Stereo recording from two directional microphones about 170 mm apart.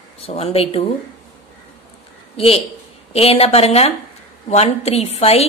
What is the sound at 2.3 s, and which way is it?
A woman's voice, 35° left (ahead or behind).